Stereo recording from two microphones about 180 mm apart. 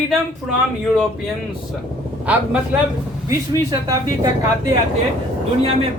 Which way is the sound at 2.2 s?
10° right (ahead or behind).